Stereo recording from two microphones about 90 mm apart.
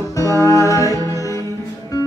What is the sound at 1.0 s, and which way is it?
Music, 40° right (ahead or behind).